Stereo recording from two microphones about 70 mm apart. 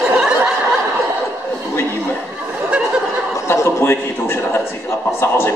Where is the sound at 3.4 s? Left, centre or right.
Left.